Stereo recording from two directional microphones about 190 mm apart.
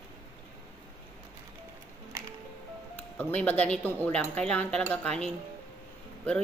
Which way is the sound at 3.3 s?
5° left (ahead or behind).